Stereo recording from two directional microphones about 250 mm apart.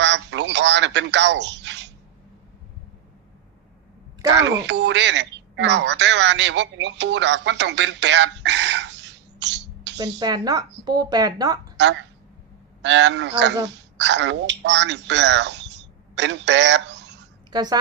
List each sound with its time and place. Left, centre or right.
0.0 s telephone: right
4.4 s speech: right
10.2 s speech: centre
12.8 s speech: right
17.5 s a woman's voice: centre